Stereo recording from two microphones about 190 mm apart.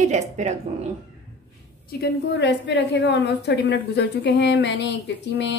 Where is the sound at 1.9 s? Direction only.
60° left (ahead or behind).